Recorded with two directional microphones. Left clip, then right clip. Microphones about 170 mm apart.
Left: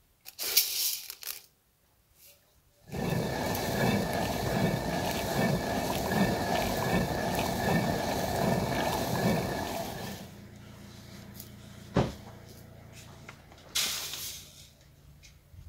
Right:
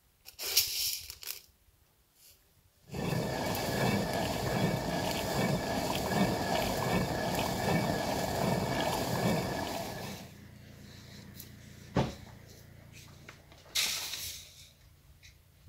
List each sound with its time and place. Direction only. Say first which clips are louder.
0.2 s tearing: left 1 dB; 20° left (ahead or behind)
2.9 s vehicle: left 2 dB; 5° left (ahead or behind)